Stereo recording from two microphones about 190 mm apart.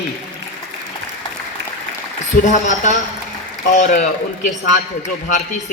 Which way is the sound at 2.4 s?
40° left (ahead or behind).